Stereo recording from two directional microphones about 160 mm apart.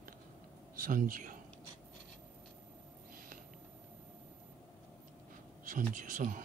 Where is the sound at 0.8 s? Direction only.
55° right (ahead or behind).